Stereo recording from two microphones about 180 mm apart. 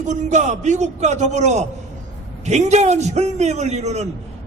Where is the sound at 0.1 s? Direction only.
40° right (ahead or behind).